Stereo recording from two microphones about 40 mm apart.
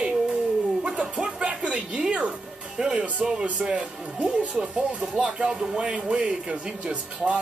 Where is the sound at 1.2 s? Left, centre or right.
Right.